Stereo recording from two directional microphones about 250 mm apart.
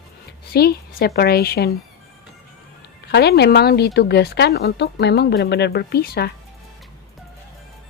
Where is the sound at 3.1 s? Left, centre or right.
Left.